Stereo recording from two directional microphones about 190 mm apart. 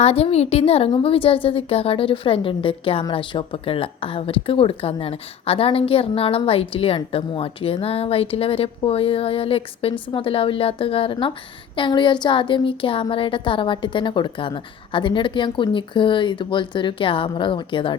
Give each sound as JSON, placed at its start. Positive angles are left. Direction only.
{"t": 0.0, "sound": "a woman's voice", "side_deg": 30}